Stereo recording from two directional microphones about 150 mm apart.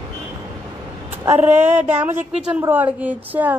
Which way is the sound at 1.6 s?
10° right (ahead or behind).